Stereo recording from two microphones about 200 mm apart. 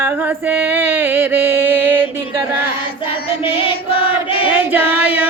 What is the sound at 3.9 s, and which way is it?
Choir, 25° left (ahead or behind).